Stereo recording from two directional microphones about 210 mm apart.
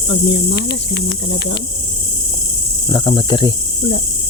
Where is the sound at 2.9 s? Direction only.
25° left (ahead or behind).